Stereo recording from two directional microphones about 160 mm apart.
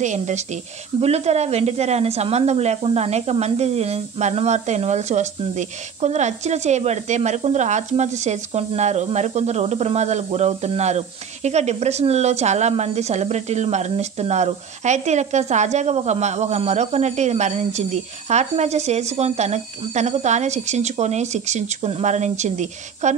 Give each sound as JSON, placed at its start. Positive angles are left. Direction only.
{"t": 0.0, "sound": "a woman's voice", "side_deg": -45}